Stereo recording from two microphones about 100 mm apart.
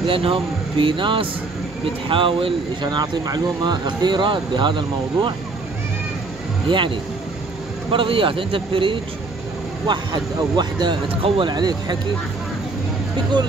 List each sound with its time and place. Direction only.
0.0 s speech: 65° right (ahead or behind)
6.7 s speech: 55° right (ahead or behind)
7.9 s speech: 60° right (ahead or behind)
9.8 s speech: 50° right (ahead or behind)